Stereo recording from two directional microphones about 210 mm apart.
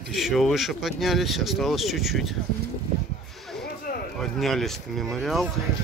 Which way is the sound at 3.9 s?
45° left (ahead or behind).